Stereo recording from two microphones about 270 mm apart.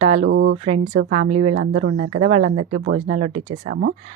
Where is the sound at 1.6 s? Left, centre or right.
Right.